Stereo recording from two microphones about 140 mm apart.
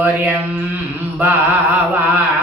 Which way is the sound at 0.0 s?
15° right (ahead or behind).